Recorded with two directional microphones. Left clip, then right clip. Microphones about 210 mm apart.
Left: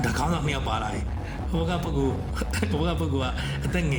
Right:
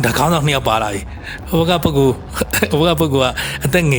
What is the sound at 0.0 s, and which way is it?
A man's voice, 55° right (ahead or behind).